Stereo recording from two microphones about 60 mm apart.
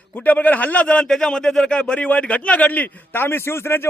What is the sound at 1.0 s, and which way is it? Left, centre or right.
A man's voice, centre.